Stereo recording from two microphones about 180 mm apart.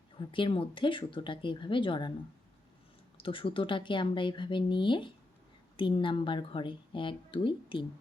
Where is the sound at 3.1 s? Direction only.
30° left (ahead or behind).